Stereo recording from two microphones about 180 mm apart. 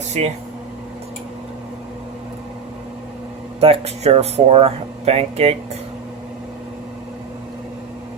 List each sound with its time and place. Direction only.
0.2 s speech: 35° right (ahead or behind)
3.6 s speech: 35° right (ahead or behind)